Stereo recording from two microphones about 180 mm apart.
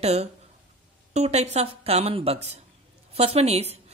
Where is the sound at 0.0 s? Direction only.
35° right (ahead or behind).